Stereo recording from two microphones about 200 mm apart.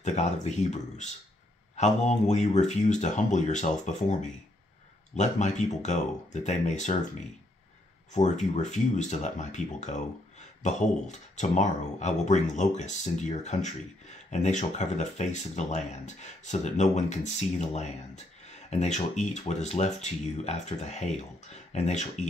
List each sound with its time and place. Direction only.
0.0 s speech: 35° left (ahead or behind)
8.1 s speech: 35° left (ahead or behind)